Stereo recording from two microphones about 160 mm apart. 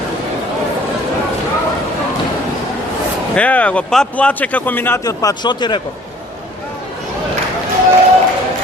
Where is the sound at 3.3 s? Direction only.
10° left (ahead or behind); by 5.8 s 30° left (ahead or behind).